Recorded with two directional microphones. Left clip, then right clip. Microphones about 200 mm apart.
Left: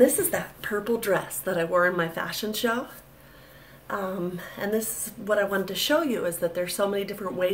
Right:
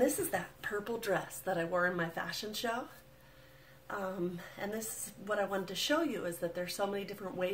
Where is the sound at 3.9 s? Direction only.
10° left (ahead or behind).